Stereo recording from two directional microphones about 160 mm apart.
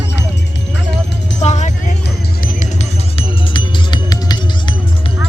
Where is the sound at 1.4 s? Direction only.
45° left (ahead or behind).